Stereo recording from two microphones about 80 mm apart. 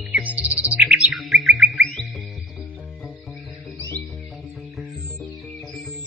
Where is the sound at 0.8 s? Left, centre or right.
Centre.